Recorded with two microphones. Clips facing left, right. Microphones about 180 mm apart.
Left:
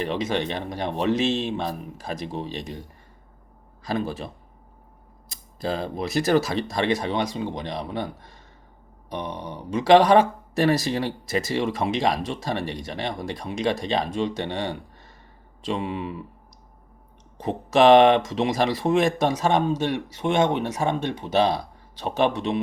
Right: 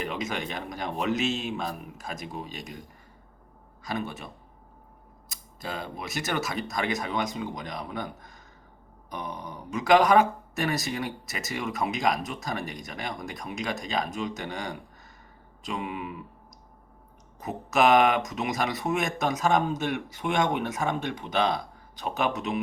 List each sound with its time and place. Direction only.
0.0 s speech: 30° left (ahead or behind)
3.8 s speech: 30° left (ahead or behind)
5.3 s speech: 35° left (ahead or behind)
9.3 s speech: 75° left (ahead or behind)
9.7 s speech: 30° left (ahead or behind)
17.4 s speech: 30° left (ahead or behind)